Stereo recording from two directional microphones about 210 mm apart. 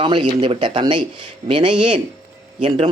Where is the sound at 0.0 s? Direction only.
25° right (ahead or behind).